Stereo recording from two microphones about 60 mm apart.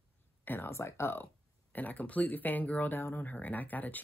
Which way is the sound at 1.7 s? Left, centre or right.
Left.